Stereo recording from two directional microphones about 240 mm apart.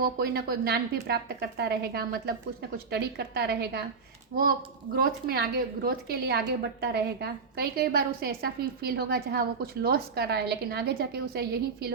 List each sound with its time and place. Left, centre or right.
0.0 s a woman's voice: right